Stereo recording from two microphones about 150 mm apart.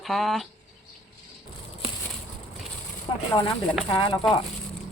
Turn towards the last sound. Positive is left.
turn(degrees=35)  # may be behind; listen again after turning